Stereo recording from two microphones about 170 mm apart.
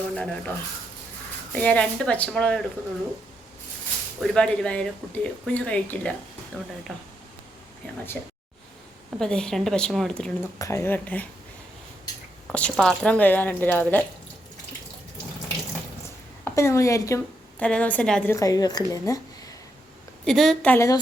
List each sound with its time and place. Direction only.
0.1 s speech: 5° left (ahead or behind)
1.5 s speech: 5° left (ahead or behind)
4.4 s speech: 5° left (ahead or behind)
8.1 s a woman's voice: 5° left (ahead or behind)
10.6 s speech: 15° left (ahead or behind)
12.5 s speech: 5° left (ahead or behind)
16.4 s a woman's voice: 15° left (ahead or behind)
17.6 s speech: 5° left (ahead or behind)
18.3 s a woman's voice: 20° left (ahead or behind)
20.2 s a woman's voice: centre (ahead or behind); by 21.0 s 15° left (ahead or behind)